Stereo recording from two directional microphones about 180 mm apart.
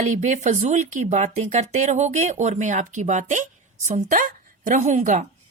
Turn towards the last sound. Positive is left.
turn(degrees=-45)  # may be behind; listen again after turning